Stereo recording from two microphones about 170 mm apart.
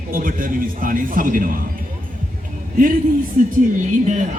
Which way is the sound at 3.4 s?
50° right (ahead or behind).